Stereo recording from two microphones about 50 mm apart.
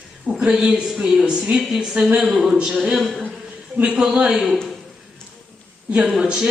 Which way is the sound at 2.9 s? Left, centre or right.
Centre.